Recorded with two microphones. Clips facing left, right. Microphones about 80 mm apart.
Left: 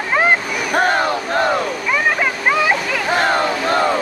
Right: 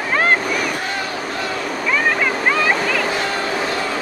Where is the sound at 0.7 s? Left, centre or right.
Left.